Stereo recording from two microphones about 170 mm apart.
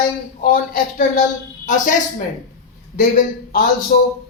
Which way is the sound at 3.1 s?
55° left (ahead or behind).